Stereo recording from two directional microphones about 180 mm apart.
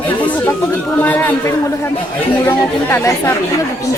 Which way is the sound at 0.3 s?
10° left (ahead or behind).